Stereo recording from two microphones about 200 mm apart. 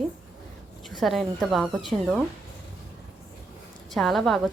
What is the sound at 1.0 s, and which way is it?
A woman's voice, centre (ahead or behind).